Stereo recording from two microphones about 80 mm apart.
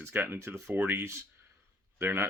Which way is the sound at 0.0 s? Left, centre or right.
Right.